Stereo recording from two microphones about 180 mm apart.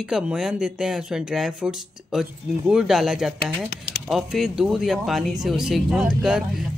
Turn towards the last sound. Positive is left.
turn(degrees=-5)  # may be behind; listen again after turning